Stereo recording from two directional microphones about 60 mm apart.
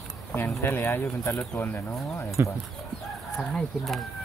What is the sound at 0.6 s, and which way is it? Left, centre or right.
Speech, left.